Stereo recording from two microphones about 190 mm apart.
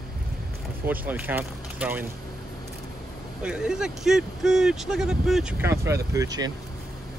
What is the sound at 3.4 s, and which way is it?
Speech, 5° right (ahead or behind).